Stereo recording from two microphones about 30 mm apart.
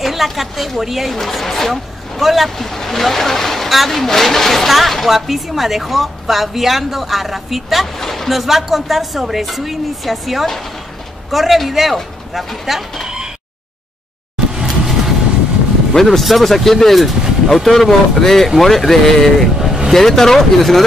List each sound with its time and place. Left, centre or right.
0.0 s a woman's voice: centre
1.1 s speech: centre
1.7 s speech: centre
2.6 s speech: centre
4.0 s speech: centre
4.6 s speech: centre
8.0 s a sound: centre
8.3 s speech: centre
14.5 s vehicle: centre
15.9 s speech: centre
19.6 s vehicle: centre
19.9 s speech: centre